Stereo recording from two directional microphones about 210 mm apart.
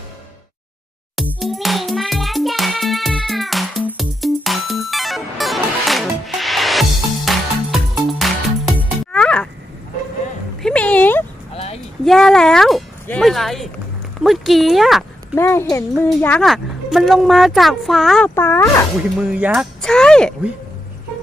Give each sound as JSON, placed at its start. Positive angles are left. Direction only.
{"t": 1.3, "sound": "music", "side_deg": 0}
{"t": 10.6, "sound": "music", "side_deg": 5}
{"t": 11.5, "sound": "a sound", "side_deg": 30}
{"t": 12.0, "sound": "a sound", "side_deg": 0}
{"t": 14.3, "sound": "speech", "side_deg": 0}
{"t": 15.4, "sound": "a child's voice", "side_deg": 10}
{"t": 19.3, "sound": "speech", "side_deg": -5}